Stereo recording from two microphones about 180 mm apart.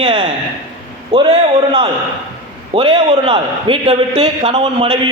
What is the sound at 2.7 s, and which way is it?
A man's voice, 30° right (ahead or behind).